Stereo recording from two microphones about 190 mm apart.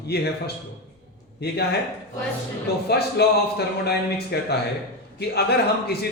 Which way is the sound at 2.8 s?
60° left (ahead or behind).